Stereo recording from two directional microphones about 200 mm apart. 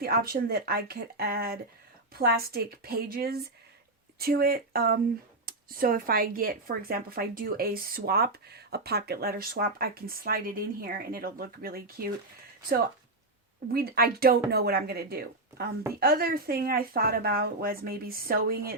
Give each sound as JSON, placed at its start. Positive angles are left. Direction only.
{"t": 0.0, "sound": "speech", "side_deg": -50}
{"t": 13.7, "sound": "speech", "side_deg": -50}